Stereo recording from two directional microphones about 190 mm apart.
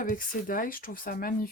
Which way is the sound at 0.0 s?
45° left (ahead or behind).